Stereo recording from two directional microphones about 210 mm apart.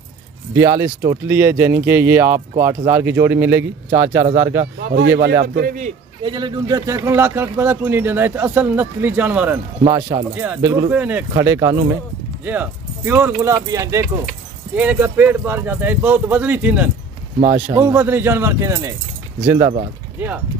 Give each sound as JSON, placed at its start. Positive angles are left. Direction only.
{"t": 0.6, "sound": "speech", "side_deg": -15}
{"t": 4.6, "sound": "a man's voice", "side_deg": -50}
{"t": 6.2, "sound": "speech", "side_deg": -20}
{"t": 9.8, "sound": "speech", "side_deg": -20}
{"t": 10.3, "sound": "speech", "side_deg": -10}
{"t": 17.4, "sound": "speech", "side_deg": -35}
{"t": 17.7, "sound": "speech", "side_deg": -10}